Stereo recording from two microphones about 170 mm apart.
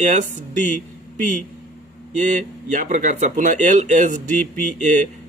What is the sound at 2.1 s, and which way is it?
Speech, 45° right (ahead or behind).